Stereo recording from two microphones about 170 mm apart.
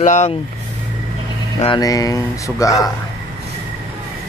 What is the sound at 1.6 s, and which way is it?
Speech, 25° left (ahead or behind).